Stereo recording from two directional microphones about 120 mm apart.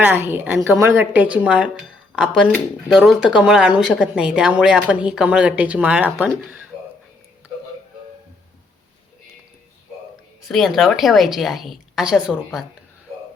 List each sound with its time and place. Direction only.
0.0 s a woman's voice: 15° right (ahead or behind)
10.5 s a woman's voice: centre (ahead or behind)